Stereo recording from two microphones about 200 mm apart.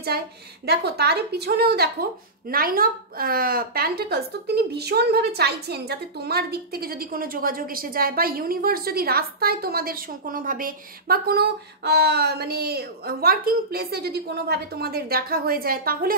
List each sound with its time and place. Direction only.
0.7 s a woman's voice: 55° right (ahead or behind)